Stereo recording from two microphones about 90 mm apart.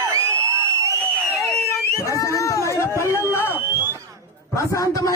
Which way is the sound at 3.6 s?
25° right (ahead or behind).